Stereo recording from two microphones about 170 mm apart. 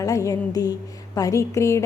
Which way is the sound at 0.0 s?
20° left (ahead or behind).